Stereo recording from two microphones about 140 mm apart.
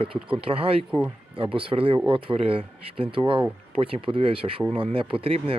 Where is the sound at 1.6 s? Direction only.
40° right (ahead or behind).